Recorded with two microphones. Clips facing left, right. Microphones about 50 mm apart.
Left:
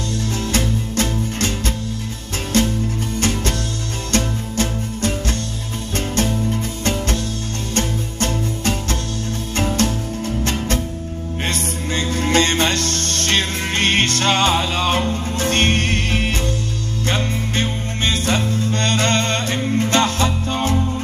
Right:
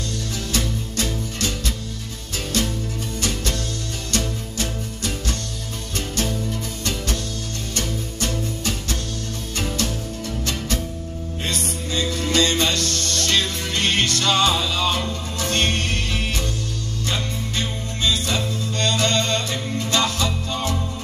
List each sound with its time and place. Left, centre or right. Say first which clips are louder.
0.5 s music: left 3 dB; left
2.5 s music: left 7 dB; left